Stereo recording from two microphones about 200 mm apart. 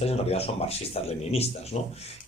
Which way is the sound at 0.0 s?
30° left (ahead or behind).